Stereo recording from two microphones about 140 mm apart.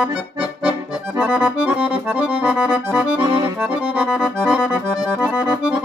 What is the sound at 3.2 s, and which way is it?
Accordion, 30° right (ahead or behind).